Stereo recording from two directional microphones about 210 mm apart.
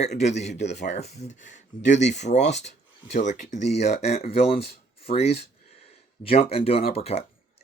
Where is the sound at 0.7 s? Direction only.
55° left (ahead or behind).